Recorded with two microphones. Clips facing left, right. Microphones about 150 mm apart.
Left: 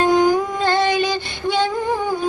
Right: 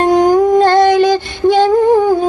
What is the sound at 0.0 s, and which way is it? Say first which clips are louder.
Music: right 5 dB; 90° right.